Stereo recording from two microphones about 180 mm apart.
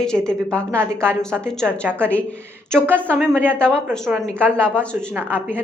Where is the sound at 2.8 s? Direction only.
10° right (ahead or behind).